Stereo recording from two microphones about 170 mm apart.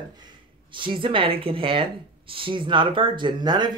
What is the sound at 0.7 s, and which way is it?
Speech, 30° right (ahead or behind).